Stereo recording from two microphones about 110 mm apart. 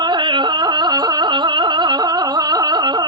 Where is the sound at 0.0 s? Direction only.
45° right (ahead or behind).